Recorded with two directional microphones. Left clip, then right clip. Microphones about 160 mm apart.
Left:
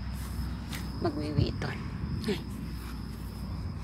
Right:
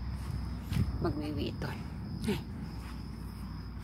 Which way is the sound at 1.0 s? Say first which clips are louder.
Left 4 dB; 20° right (ahead or behind).